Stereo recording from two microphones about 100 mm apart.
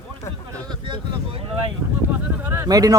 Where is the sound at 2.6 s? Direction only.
40° right (ahead or behind).